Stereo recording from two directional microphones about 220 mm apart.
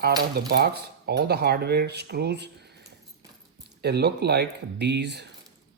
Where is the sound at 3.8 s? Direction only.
50° right (ahead or behind).